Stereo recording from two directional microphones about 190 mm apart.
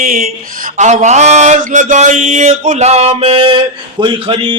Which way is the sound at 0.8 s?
40° right (ahead or behind).